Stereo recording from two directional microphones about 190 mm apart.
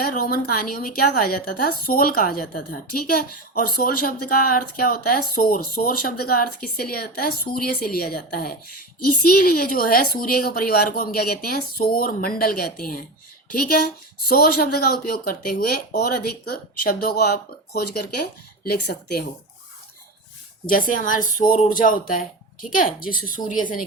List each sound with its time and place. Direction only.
0.0 s a woman's voice: 45° left (ahead or behind)
20.7 s a woman's voice: 45° left (ahead or behind)